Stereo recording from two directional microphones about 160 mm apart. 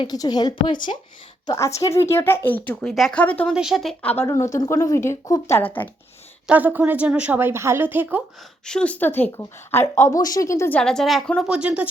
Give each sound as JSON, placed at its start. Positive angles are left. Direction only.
{"t": 0.0, "sound": "speech", "side_deg": 25}
{"t": 3.5, "sound": "a woman's voice", "side_deg": -5}
{"t": 4.2, "sound": "speech", "side_deg": 20}
{"t": 6.5, "sound": "a woman's voice", "side_deg": -10}
{"t": 8.6, "sound": "speech", "side_deg": 5}
{"t": 10.8, "sound": "a woman's voice", "side_deg": 5}